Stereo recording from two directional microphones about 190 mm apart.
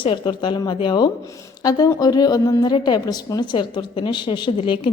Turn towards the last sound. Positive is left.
turn(degrees=25)  # may be behind; listen again after turning